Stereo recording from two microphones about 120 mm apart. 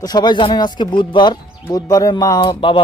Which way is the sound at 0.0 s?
35° left (ahead or behind).